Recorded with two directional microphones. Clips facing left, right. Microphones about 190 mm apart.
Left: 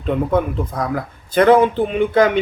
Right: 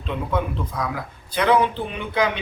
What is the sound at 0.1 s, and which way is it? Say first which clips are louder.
Speech: left 7 dB; 50° left (ahead or behind).